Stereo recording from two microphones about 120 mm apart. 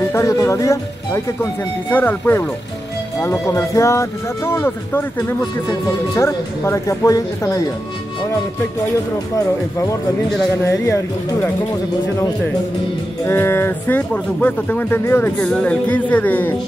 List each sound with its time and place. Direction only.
0.1 s speech: 25° left (ahead or behind)
9.3 s speech: 25° left (ahead or behind)
13.2 s speech: 20° left (ahead or behind)
15.4 s a woman's voice: 10° left (ahead or behind)